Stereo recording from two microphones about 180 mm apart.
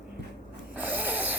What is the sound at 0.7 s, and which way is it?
Snort, 10° right (ahead or behind).